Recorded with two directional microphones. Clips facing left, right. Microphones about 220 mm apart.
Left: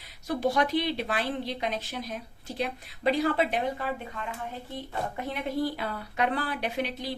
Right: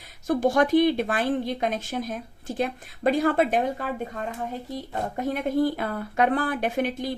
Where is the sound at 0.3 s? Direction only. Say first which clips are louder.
Right 6 dB; 50° right (ahead or behind).